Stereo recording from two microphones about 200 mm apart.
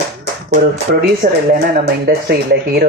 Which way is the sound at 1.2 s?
40° right (ahead or behind).